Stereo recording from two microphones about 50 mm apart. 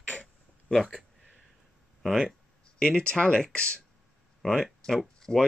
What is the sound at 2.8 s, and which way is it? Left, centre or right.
Speech, centre.